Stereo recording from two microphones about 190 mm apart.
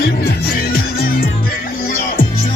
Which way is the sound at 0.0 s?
50° left (ahead or behind).